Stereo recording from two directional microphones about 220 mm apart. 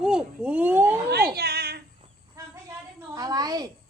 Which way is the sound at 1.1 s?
45° right (ahead or behind).